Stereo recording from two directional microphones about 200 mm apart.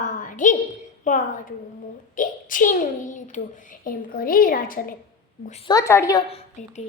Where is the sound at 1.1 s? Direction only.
40° left (ahead or behind).